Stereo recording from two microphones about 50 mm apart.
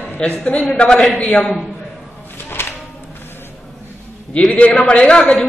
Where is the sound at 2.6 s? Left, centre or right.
Left.